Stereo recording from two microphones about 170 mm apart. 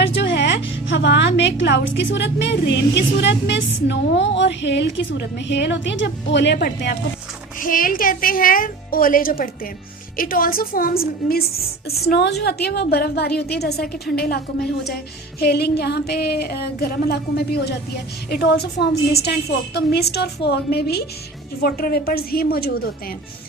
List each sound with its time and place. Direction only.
0.0 s a woman's voice: 90° left
7.6 s a woman's voice: 55° left (ahead or behind)
12.0 s music: 75° left (ahead or behind)
21.6 s a woman's voice: 65° left (ahead or behind)